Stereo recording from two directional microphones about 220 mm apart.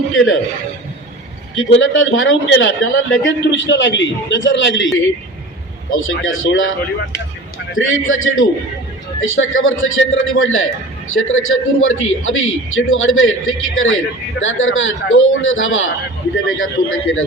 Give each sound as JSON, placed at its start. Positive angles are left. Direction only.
{"t": 1.5, "sound": "a man's voice", "side_deg": 65}
{"t": 7.8, "sound": "a man's voice", "side_deg": 65}